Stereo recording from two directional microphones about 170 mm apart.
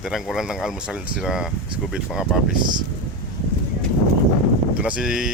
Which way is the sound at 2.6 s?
25° right (ahead or behind).